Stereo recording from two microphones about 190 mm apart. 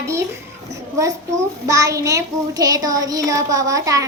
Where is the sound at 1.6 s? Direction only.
15° right (ahead or behind).